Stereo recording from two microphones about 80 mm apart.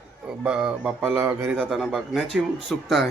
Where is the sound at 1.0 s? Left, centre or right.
Right.